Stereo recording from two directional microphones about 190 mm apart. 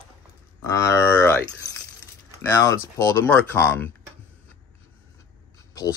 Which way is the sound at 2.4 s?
15° left (ahead or behind).